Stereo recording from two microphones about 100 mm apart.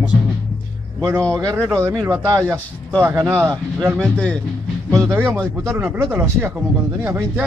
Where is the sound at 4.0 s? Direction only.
10° left (ahead or behind).